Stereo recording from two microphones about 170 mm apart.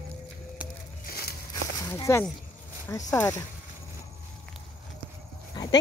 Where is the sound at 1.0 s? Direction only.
65° left (ahead or behind).